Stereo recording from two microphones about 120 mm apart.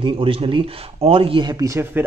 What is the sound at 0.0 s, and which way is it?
Speech, 50° right (ahead or behind).